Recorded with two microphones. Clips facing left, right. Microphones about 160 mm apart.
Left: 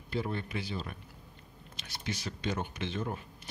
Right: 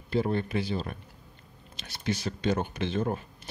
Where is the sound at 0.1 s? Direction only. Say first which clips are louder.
Right 7 dB; 35° right (ahead or behind).